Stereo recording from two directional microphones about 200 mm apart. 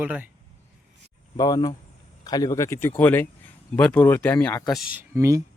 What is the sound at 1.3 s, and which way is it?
Speech, 20° left (ahead or behind).